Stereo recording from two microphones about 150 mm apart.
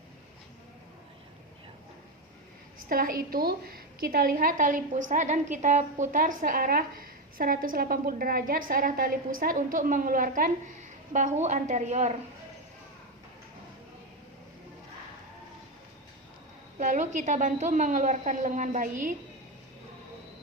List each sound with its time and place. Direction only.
2.9 s a woman's voice: 70° right (ahead or behind)
11.1 s a woman's voice: 55° right (ahead or behind)
16.7 s a woman's voice: 55° right (ahead or behind)